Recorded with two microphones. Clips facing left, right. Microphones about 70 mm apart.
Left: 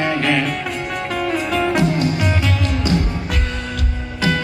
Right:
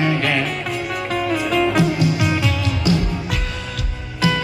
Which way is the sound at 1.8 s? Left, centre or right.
Left.